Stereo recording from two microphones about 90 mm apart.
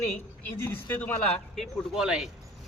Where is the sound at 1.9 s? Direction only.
5° right (ahead or behind).